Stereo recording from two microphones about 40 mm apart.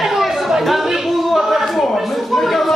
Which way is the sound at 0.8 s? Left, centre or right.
Centre.